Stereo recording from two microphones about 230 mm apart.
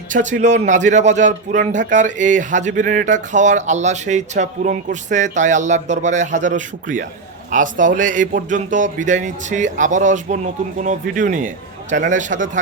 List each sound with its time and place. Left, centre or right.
0.1 s a man's voice: right